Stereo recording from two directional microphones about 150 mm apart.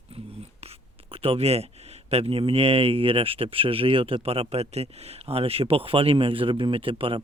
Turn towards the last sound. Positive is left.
turn(degrees=-35)  # may be behind; listen again after turning